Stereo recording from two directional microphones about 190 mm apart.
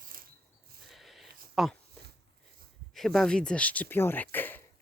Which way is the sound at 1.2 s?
55° right (ahead or behind).